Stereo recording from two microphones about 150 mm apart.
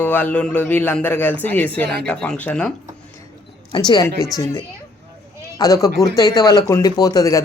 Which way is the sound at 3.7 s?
30° left (ahead or behind).